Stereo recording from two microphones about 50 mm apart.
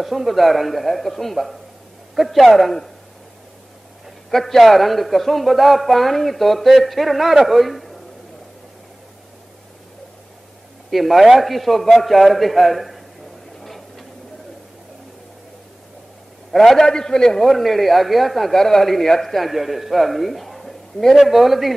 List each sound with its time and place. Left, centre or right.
0.0 s a man's voice: centre
4.3 s a man's voice: centre
10.9 s a man's voice: centre
13.6 s a sound: centre
16.5 s a man's voice: centre
17.5 s a man's voice: centre